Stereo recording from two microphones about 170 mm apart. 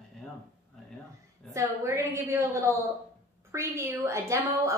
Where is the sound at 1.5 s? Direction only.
15° right (ahead or behind).